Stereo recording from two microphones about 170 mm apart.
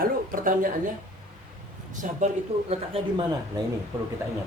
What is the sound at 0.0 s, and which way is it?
Speech, 55° right (ahead or behind).